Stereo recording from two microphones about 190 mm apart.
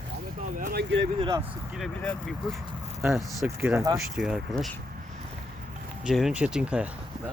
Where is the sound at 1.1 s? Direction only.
25° right (ahead or behind).